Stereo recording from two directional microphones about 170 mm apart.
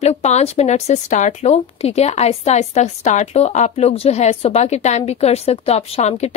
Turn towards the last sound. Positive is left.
turn(degrees=40)  # may be behind; listen again after turning